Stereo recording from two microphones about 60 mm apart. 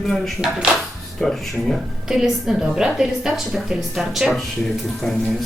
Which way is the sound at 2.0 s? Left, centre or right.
Centre.